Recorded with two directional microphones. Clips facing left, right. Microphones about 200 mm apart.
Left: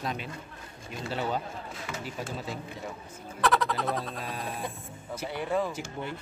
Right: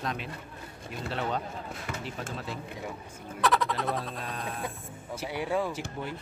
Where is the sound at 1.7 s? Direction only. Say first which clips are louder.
Even; 55° right (ahead or behind).